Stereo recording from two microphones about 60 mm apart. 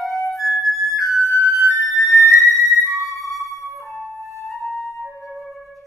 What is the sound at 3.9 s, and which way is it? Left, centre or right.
Flute, centre.